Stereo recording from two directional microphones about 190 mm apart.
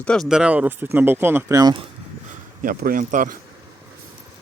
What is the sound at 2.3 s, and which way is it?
Speech, 50° right (ahead or behind).